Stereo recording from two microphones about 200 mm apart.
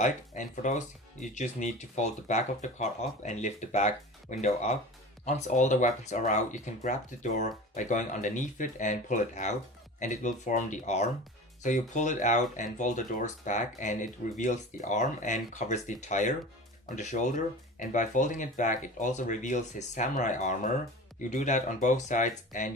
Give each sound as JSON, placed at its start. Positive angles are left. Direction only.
{"t": 0.0, "sound": "speech", "side_deg": 40}